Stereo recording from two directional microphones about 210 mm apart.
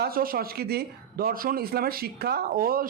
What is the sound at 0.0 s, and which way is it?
A man's voice, 45° right (ahead or behind).